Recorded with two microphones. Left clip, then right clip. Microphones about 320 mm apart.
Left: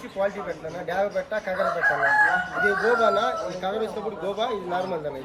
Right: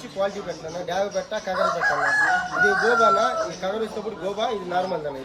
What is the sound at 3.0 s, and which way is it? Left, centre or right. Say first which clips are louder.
Speech: right 3 dB; centre.